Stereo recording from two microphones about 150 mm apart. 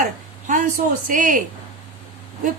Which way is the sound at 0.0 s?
60° right (ahead or behind).